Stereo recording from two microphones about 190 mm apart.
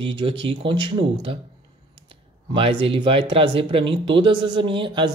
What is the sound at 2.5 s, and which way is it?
Speech, 30° right (ahead or behind).